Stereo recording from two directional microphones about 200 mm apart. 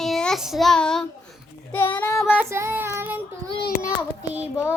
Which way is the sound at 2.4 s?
15° right (ahead or behind).